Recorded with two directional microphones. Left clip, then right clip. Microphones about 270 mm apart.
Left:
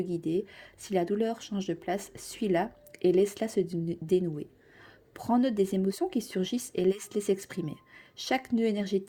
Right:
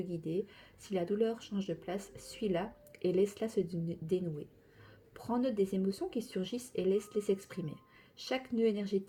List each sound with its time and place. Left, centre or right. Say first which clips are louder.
0.0 s speech: left 7 dB; left